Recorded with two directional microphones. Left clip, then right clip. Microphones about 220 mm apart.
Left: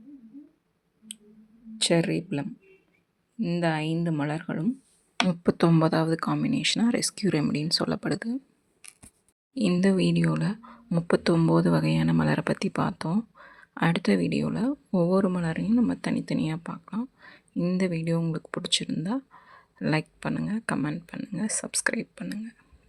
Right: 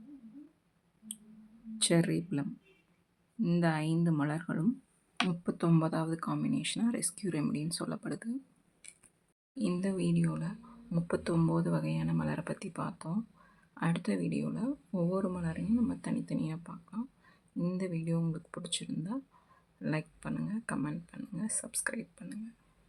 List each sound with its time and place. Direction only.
1.8 s speech: 15° left (ahead or behind)
5.3 s speech: 30° left (ahead or behind)
9.8 s speech: 30° left (ahead or behind)